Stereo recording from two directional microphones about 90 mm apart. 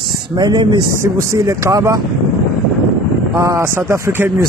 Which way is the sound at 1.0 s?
35° right (ahead or behind).